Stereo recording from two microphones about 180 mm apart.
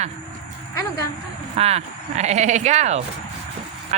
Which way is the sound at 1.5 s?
35° right (ahead or behind).